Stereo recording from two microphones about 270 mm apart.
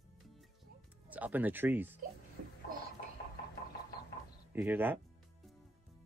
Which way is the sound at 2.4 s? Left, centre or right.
Right.